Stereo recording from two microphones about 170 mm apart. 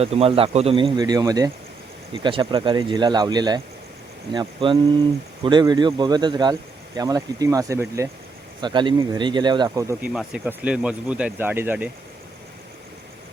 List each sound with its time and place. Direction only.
0.0 s a man's voice: 35° right (ahead or behind); by 8.1 s 15° right (ahead or behind)
8.6 s a man's voice: 25° right (ahead or behind)
10.0 s speech: 5° right (ahead or behind)